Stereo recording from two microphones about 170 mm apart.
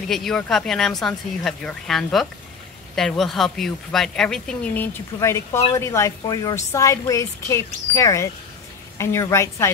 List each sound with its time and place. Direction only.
0.1 s a woman's voice: centre (ahead or behind)